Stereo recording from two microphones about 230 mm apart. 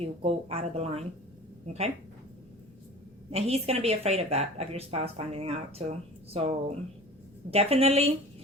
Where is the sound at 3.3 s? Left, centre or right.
Right.